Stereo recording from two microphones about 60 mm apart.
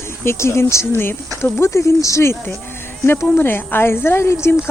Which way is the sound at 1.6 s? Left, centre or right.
Left.